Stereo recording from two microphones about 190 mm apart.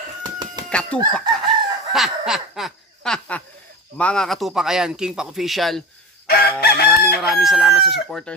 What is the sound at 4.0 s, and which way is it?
Speech, 5° left (ahead or behind).